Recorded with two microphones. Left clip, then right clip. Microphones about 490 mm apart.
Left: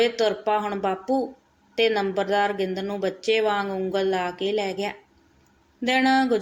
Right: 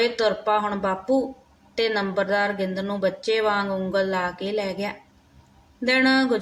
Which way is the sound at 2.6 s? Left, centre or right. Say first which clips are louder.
Right 2 dB; right.